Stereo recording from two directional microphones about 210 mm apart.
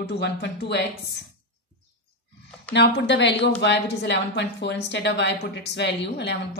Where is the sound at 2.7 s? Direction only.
50° left (ahead or behind).